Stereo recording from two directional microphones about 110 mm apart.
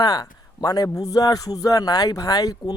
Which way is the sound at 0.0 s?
35° left (ahead or behind).